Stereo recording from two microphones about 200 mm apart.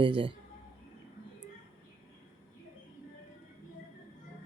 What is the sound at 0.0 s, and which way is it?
Speech, 25° right (ahead or behind).